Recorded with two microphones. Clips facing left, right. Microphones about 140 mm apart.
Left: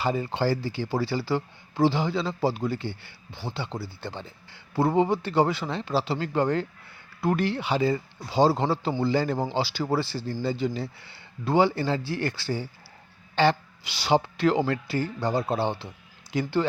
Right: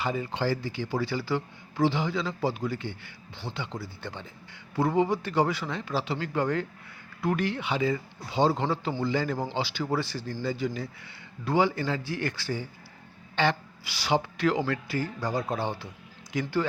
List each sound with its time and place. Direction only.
0.0 s a man's voice: 35° left (ahead or behind)